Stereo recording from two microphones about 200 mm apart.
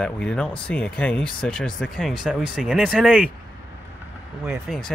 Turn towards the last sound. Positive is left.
turn(degrees=0)  # may be behind; listen again after turning